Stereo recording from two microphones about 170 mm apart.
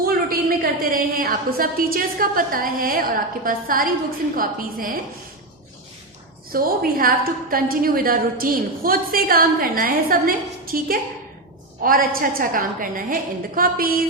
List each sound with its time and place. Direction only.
0.0 s a woman's voice: 60° right (ahead or behind)
6.5 s a woman's voice: 60° right (ahead or behind)